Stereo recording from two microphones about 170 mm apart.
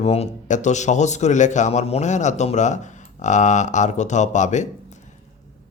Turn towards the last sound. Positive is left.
turn(degrees=45)  # may be behind; listen again after turning